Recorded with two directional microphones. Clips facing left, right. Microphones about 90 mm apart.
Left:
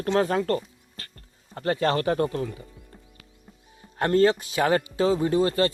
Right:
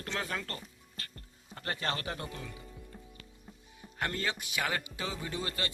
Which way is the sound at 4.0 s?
40° left (ahead or behind).